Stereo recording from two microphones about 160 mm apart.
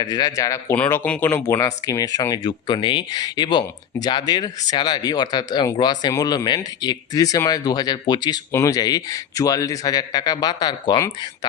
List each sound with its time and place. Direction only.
0.0 s speech: 25° left (ahead or behind)